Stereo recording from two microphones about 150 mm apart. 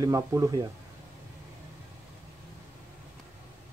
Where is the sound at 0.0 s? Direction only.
20° right (ahead or behind).